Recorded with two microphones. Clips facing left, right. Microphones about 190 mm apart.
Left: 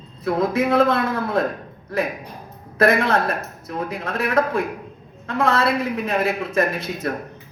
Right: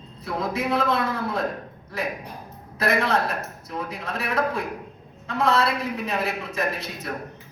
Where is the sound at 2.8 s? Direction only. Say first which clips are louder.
Left 5 dB; 50° left (ahead or behind).